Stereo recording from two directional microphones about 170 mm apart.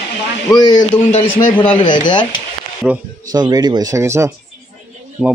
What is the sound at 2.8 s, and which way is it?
Speech, 5° right (ahead or behind).